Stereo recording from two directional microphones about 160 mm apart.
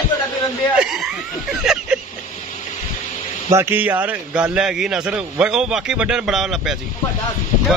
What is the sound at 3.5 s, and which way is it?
A man's voice, 10° right (ahead or behind).